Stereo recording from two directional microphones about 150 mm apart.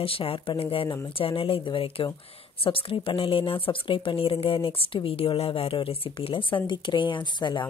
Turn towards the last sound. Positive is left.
turn(degrees=30)  # may be behind; listen again after turning